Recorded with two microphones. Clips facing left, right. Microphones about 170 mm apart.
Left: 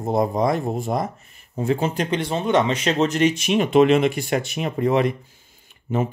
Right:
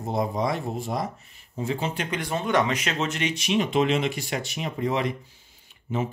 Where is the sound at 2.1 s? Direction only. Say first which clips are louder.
Left 5 dB; 25° left (ahead or behind).